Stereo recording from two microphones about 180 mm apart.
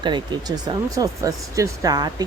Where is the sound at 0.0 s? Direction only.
25° right (ahead or behind).